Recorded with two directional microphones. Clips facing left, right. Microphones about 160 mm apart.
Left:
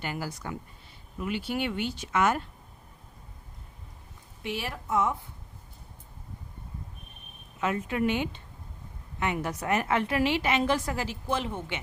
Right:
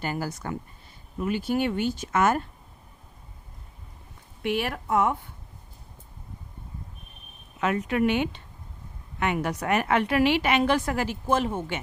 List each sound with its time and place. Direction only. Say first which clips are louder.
0.0 s speech: right 4 dB; 45° right (ahead or behind)
4.4 s speech: right 6 dB; 60° right (ahead or behind)
7.6 s a woman's voice: right 4 dB; 70° right (ahead or behind); by 11.8 s 45° right (ahead or behind)